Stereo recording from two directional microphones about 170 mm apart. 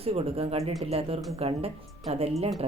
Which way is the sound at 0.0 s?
35° right (ahead or behind).